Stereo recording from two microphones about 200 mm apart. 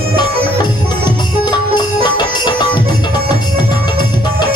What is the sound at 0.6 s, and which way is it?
Music, 20° left (ahead or behind).